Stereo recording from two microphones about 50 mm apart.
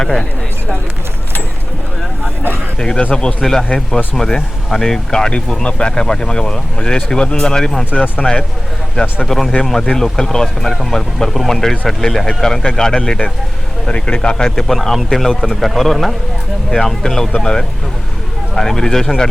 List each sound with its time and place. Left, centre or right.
0.0 s speech: centre
2.7 s speech: centre
3.4 s speech: centre
9.2 s a man's voice: centre
16.6 s speech: centre